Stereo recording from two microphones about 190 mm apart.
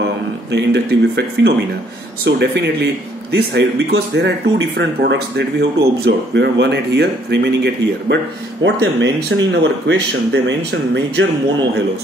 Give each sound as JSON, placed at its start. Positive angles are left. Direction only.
{"t": 0.5, "sound": "speech", "side_deg": -65}